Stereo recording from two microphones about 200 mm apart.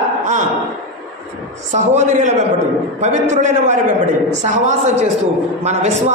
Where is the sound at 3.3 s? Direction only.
35° right (ahead or behind).